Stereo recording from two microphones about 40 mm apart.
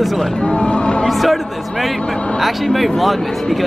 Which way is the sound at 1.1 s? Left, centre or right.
Centre.